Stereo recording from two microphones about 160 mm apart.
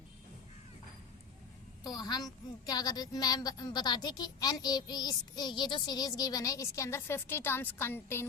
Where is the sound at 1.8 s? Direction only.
25° left (ahead or behind).